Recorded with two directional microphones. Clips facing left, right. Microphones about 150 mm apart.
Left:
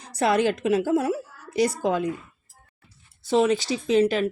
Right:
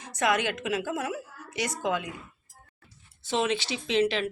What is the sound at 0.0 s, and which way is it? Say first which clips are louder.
A woman's voice: left 5 dB; 35° left (ahead or behind).